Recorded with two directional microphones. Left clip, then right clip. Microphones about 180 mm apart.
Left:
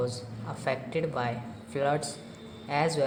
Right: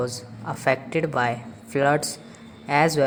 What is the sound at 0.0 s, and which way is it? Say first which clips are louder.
A woman's voice: right 4 dB; 35° right (ahead or behind).